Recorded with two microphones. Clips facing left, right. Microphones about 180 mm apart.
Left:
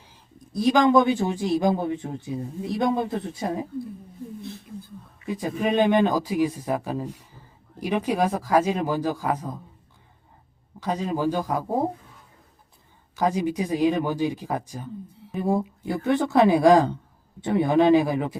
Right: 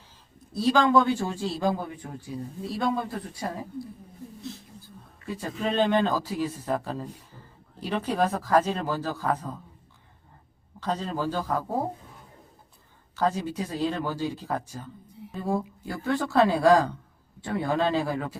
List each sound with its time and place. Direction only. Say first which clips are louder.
0.5 s speech: left 3 dB; 15° left (ahead or behind)
5.2 s speech: left 5 dB; 15° left (ahead or behind)
10.8 s speech: left 3 dB; 10° left (ahead or behind)
13.1 s speech: left 3 dB; 15° left (ahead or behind)